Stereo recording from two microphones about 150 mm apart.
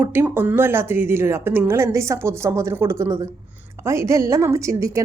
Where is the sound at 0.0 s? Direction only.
15° right (ahead or behind).